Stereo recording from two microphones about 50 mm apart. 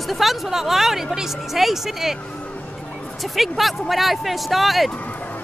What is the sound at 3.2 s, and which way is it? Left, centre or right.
Speech, centre.